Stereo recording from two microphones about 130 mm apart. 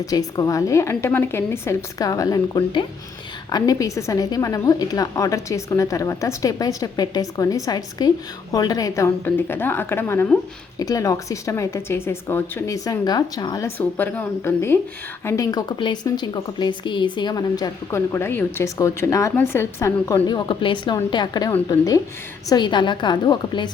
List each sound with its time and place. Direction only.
0.0 s a woman's voice: 30° left (ahead or behind)
10.8 s a woman's voice: 25° left (ahead or behind)
13.7 s a woman's voice: 15° left (ahead or behind); by 23.7 s 35° left (ahead or behind)